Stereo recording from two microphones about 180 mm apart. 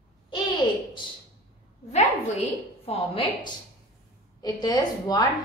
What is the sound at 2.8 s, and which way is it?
Speech, 30° left (ahead or behind).